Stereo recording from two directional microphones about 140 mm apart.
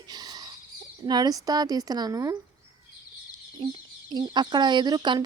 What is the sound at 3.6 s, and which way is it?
Speech, 30° right (ahead or behind).